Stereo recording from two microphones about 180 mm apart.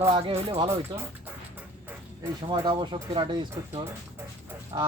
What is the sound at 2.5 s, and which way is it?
Speech, 25° right (ahead or behind).